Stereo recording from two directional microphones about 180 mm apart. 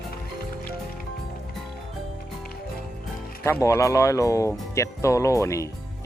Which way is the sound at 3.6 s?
15° left (ahead or behind).